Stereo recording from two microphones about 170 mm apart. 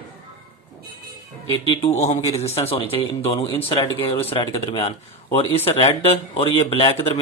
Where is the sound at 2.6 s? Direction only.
35° left (ahead or behind).